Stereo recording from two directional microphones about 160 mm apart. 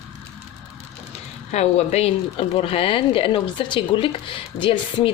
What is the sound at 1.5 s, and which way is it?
Speech, 45° left (ahead or behind).